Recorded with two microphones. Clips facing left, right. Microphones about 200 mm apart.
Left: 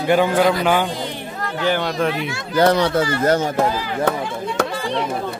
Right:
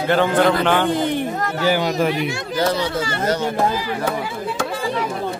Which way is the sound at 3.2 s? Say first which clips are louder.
Left 2 dB; 50° left (ahead or behind).